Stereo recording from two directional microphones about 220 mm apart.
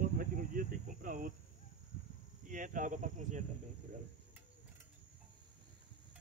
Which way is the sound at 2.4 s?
35° right (ahead or behind).